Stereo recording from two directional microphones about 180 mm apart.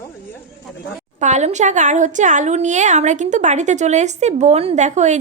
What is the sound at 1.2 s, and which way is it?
A woman's voice, 40° right (ahead or behind).